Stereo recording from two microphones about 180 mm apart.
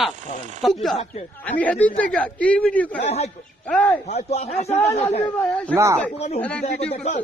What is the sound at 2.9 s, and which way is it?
Speech, 40° left (ahead or behind).